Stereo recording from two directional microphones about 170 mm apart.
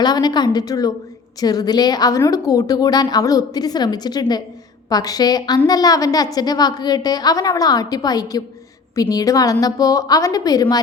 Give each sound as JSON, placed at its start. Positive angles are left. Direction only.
{"t": 0.0, "sound": "a woman's voice", "side_deg": 25}